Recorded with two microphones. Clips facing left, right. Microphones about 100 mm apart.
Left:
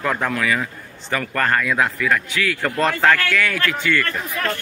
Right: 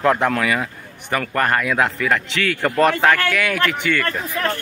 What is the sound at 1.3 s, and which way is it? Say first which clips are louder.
A man's voice: right 1 dB; 20° right (ahead or behind).